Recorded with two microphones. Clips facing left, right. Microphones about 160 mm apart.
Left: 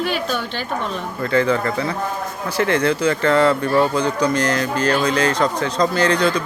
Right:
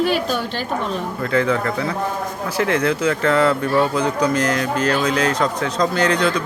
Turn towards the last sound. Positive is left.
turn(degrees=0)  # may be behind; listen again after turning